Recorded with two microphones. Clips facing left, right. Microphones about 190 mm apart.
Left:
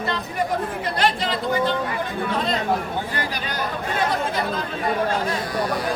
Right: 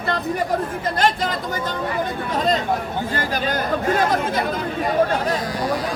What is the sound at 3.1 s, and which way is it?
Speech, 45° right (ahead or behind).